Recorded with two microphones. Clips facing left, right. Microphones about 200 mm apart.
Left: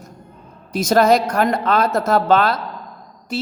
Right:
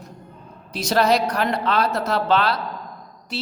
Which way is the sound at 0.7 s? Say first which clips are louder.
Left 5 dB; 45° left (ahead or behind).